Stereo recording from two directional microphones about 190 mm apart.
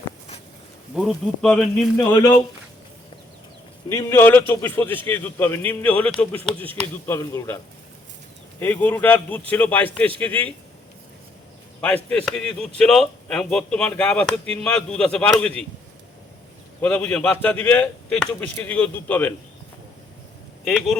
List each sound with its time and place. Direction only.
0.9 s a man's voice: centre (ahead or behind)
2.0 s speech: 20° left (ahead or behind)
3.8 s speech: 15° left (ahead or behind)
11.8 s a man's voice: 10° left (ahead or behind)
16.8 s speech: 10° left (ahead or behind)
20.7 s a man's voice: 5° left (ahead or behind)